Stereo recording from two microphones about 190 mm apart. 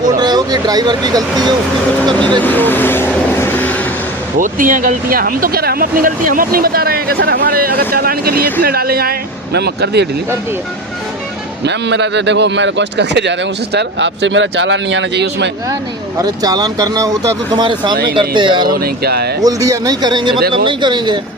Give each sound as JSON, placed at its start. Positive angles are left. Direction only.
{"t": 0.2, "sound": "speech", "side_deg": -20}
{"t": 2.4, "sound": "vehicle", "side_deg": 10}
{"t": 4.4, "sound": "speech", "side_deg": -45}
{"t": 11.6, "sound": "speech", "side_deg": -65}
{"t": 16.1, "sound": "speech", "side_deg": -20}
{"t": 18.7, "sound": "speech", "side_deg": -55}
{"t": 19.4, "sound": "speech", "side_deg": -20}